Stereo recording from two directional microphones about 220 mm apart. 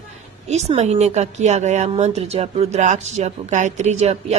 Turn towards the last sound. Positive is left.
turn(degrees=-30)  # may be behind; listen again after turning